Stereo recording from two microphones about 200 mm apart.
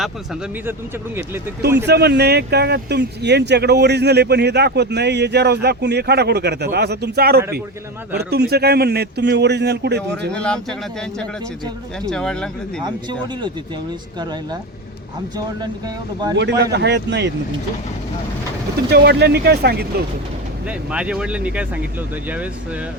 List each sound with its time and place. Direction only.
0.6 s speech: 10° right (ahead or behind)
1.6 s speech: 55° right (ahead or behind)
10.3 s speech: 5° left (ahead or behind)
12.0 s speech: 5° left (ahead or behind)
12.8 s speech: 20° right (ahead or behind)
16.4 s speech: 60° right (ahead or behind)
18.9 s speech: 55° right (ahead or behind)
20.7 s speech: 5° right (ahead or behind)